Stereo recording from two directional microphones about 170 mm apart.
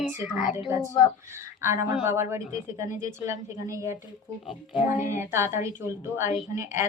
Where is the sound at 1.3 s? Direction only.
15° right (ahead or behind).